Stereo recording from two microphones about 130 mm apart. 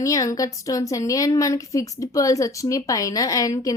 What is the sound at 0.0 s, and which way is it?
A woman's voice, 25° left (ahead or behind).